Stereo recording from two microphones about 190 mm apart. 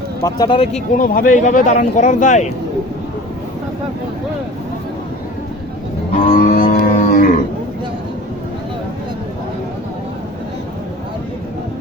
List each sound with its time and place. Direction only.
0.2 s speech: 20° left (ahead or behind)
0.9 s speech: 45° left (ahead or behind)
6.2 s livestock: 40° left (ahead or behind)